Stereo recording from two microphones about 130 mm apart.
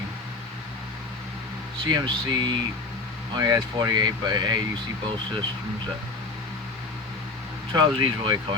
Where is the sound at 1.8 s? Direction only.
35° right (ahead or behind).